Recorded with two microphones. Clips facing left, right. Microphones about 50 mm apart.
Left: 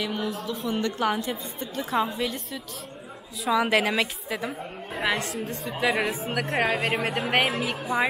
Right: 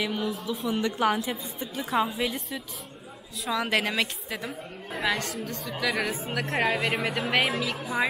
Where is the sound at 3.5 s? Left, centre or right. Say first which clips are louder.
Left 4 dB; centre.